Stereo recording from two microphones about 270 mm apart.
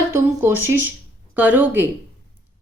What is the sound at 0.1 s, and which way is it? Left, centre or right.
A woman's voice, centre.